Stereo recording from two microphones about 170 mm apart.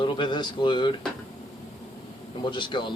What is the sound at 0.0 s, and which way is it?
Speech, 30° left (ahead or behind).